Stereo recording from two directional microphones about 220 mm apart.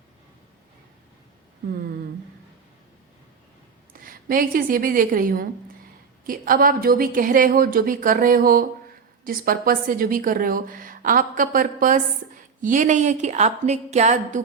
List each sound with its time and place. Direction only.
3.9 s a woman's voice: 40° right (ahead or behind)